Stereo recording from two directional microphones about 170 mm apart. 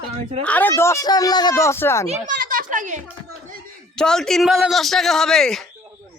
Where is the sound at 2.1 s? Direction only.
50° right (ahead or behind).